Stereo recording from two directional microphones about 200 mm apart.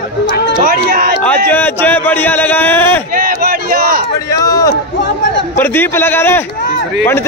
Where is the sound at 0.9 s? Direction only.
50° right (ahead or behind).